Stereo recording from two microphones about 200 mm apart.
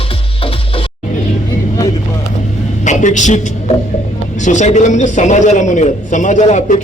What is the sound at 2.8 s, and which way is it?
A woman's voice, 40° left (ahead or behind).